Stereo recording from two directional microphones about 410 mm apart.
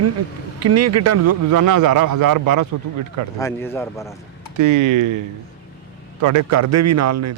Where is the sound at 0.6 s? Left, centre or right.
Right.